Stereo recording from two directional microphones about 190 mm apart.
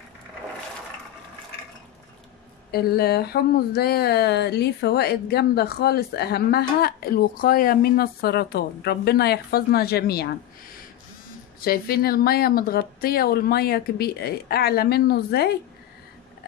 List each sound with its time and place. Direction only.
2.7 s speech: 55° left (ahead or behind)
11.6 s a woman's voice: 50° left (ahead or behind)